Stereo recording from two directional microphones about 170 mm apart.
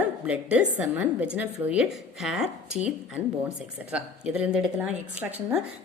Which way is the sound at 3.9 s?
5° right (ahead or behind).